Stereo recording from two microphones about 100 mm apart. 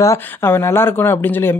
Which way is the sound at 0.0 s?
30° left (ahead or behind).